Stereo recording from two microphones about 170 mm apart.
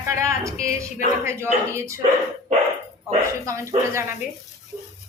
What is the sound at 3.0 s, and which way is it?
A woman's voice, 15° right (ahead or behind).